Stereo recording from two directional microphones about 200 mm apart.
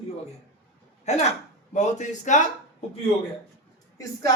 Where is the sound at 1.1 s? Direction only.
35° left (ahead or behind).